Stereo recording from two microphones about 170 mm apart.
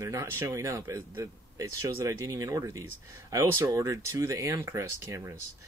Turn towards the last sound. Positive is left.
turn(degrees=-15)  # may be behind; listen again after turning